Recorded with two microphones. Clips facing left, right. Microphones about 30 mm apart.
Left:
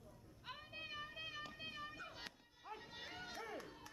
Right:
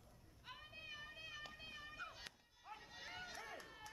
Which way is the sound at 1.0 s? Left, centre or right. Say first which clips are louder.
Left 5 dB; centre.